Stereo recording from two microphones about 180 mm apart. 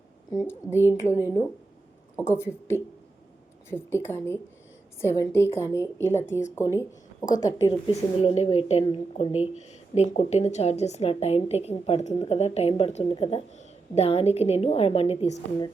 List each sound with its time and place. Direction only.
0.3 s a woman's voice: 15° left (ahead or behind)
8.2 s a woman's voice: 35° left (ahead or behind)